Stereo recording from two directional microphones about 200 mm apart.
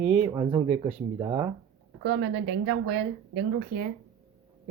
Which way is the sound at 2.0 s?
60° right (ahead or behind).